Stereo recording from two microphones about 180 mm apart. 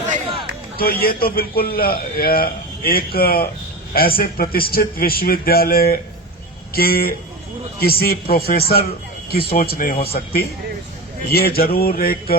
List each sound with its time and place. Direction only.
0.8 s a man's voice: 55° left (ahead or behind)